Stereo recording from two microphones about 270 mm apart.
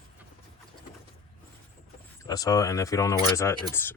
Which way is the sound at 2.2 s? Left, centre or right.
Centre.